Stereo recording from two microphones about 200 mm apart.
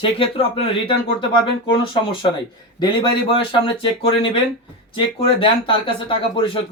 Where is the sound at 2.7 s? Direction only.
25° left (ahead or behind).